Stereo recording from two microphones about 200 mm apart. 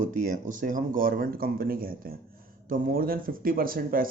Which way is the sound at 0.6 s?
45° right (ahead or behind).